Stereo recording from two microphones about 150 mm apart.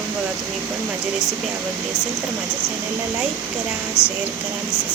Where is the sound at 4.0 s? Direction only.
15° left (ahead or behind).